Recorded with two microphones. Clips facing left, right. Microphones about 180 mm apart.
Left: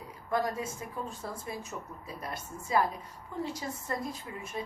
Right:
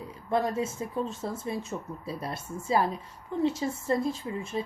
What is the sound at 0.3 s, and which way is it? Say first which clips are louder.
A woman's voice: right 4 dB; 25° right (ahead or behind).